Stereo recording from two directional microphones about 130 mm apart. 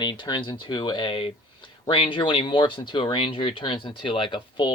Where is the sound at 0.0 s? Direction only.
35° left (ahead or behind).